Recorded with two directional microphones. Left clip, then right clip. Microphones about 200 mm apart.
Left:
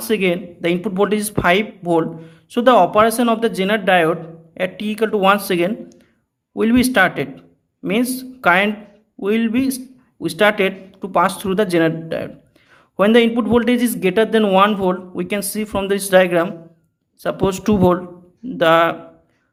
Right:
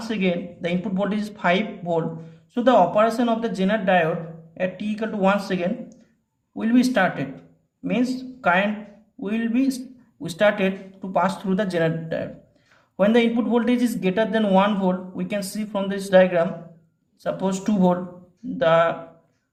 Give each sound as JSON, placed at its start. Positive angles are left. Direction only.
{"t": 0.1, "sound": "speech", "side_deg": 30}